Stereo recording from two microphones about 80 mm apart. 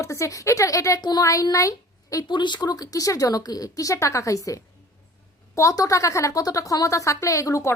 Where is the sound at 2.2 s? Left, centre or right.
Left.